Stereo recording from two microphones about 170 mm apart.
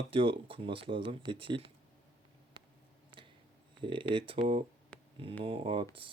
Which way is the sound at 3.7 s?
30° right (ahead or behind).